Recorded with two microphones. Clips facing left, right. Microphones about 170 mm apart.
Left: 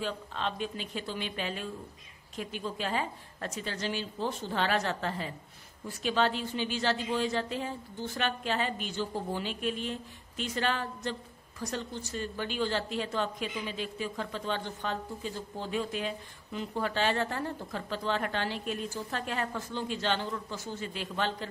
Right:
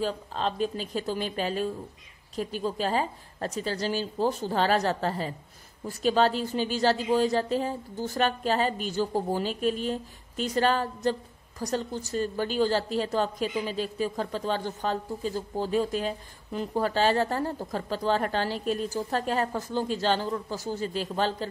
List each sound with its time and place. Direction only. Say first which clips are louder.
0.0 s a woman's voice: right 5 dB; 35° right (ahead or behind)